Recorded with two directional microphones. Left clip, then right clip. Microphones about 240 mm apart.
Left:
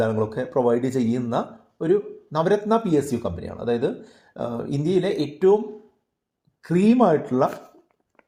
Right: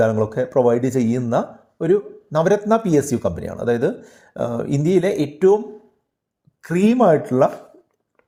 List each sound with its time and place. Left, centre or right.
0.0 s speech: right